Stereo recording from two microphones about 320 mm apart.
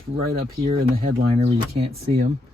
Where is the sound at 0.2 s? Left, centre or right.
Right.